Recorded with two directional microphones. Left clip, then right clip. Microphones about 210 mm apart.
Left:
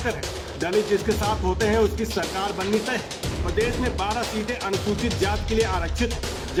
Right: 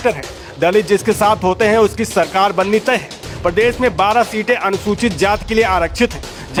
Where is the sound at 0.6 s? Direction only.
50° right (ahead or behind).